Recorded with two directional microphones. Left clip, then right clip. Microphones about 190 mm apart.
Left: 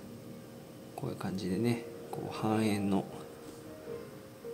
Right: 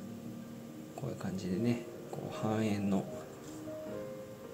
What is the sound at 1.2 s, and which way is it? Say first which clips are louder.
Speech: left 2 dB; 15° left (ahead or behind).